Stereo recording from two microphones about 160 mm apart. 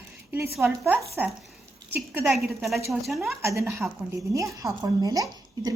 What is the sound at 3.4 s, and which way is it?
A woman's voice, 15° right (ahead or behind).